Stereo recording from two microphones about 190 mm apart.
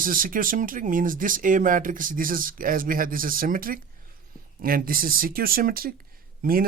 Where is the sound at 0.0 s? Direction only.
45° right (ahead or behind).